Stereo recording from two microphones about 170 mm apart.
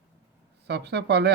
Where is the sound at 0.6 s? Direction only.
80° right.